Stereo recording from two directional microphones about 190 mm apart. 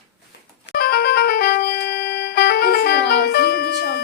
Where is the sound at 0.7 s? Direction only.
55° left (ahead or behind).